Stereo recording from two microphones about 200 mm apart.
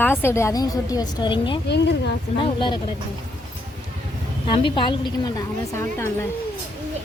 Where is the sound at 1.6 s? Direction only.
60° left (ahead or behind).